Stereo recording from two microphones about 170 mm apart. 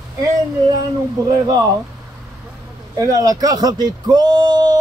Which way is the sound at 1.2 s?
20° right (ahead or behind).